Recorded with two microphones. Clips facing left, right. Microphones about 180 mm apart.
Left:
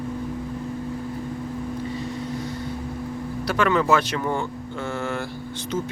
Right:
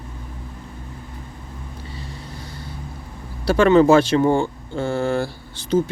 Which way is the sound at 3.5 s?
30° right (ahead or behind).